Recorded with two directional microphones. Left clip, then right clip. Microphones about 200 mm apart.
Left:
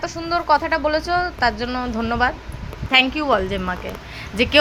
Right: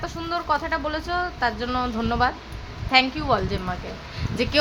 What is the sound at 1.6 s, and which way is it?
A woman's voice, 5° left (ahead or behind).